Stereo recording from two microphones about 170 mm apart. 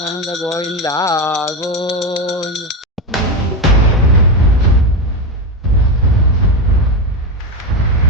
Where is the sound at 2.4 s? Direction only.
Centre (ahead or behind).